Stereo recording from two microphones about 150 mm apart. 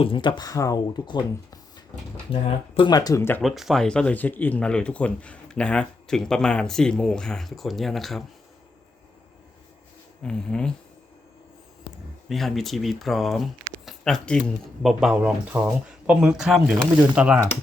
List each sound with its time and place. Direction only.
0.0 s speech: 35° left (ahead or behind)
2.3 s speech: 35° left (ahead or behind); by 3.4 s 15° left (ahead or behind)
3.4 s speech: centre (ahead or behind)
10.2 s speech: 5° left (ahead or behind)
12.3 s speech: centre (ahead or behind)